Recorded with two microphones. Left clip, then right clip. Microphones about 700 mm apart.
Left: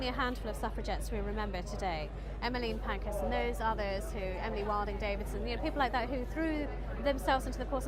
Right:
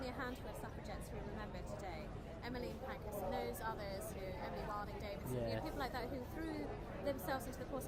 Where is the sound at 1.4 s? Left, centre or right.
Left.